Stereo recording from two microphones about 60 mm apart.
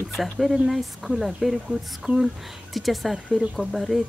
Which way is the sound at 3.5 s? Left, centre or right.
Centre.